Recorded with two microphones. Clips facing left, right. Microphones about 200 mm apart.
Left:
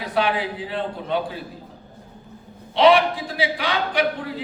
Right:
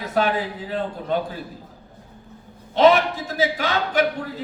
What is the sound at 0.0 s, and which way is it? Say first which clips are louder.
Speech: right 1 dB; 45° right (ahead or behind).